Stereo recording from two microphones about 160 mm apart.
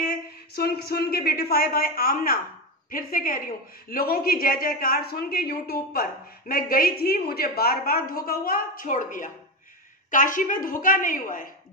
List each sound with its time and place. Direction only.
0.1 s a woman's voice: 75° left (ahead or behind); by 11.4 s 55° left (ahead or behind)